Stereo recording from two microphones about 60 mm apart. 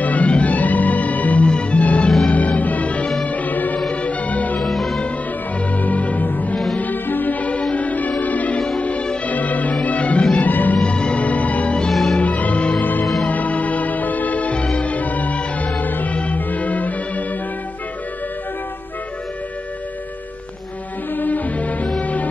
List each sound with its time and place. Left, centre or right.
0.0 s music: left
2.3 s music: left
4.6 s music: centre
5.8 s music: left
10.8 s music: centre
11.9 s music: centre
12.2 s music: left
13.0 s music: centre
13.3 s music: left
21.1 s music: left